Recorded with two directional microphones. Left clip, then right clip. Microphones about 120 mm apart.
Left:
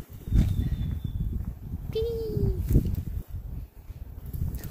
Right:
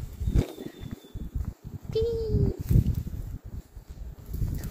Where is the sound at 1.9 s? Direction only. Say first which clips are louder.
Right 2 dB; centre (ahead or behind).